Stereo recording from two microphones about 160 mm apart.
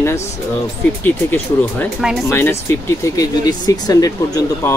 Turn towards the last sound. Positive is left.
turn(degrees=20)  # may be behind; listen again after turning